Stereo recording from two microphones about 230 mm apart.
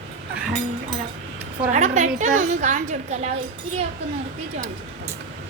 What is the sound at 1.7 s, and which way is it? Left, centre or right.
Speech, right.